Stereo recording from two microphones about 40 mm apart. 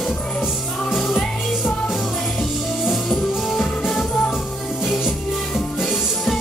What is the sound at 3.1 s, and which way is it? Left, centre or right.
Music, centre.